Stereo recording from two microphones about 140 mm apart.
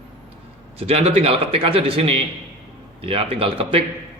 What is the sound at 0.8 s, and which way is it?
A man's voice, 45° right (ahead or behind).